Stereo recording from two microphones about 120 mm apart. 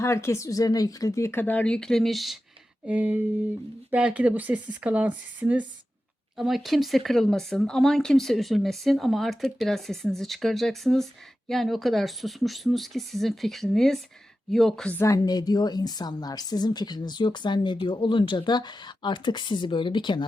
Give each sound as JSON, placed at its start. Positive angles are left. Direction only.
{"t": 0.0, "sound": "speech", "side_deg": 25}
{"t": 2.8, "sound": "speech", "side_deg": -10}
{"t": 6.3, "sound": "speech", "side_deg": 0}
{"t": 14.9, "sound": "a woman's voice", "side_deg": 25}